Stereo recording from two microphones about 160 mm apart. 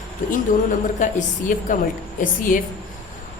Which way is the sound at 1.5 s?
55° left (ahead or behind).